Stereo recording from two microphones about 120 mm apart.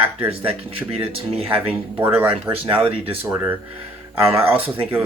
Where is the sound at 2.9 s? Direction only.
50° right (ahead or behind).